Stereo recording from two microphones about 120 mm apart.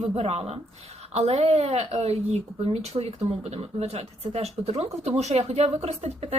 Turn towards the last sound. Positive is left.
turn(degrees=-60)  # may be behind; listen again after turning